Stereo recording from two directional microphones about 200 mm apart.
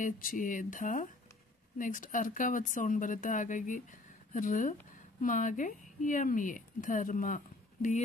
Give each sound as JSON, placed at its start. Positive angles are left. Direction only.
{"t": 0.0, "sound": "speech", "side_deg": 40}